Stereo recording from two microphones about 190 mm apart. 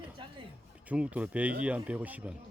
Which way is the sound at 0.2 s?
25° right (ahead or behind).